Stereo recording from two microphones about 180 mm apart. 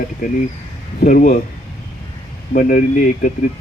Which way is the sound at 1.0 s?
50° left (ahead or behind).